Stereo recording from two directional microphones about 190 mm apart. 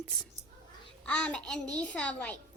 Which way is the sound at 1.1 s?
5° left (ahead or behind).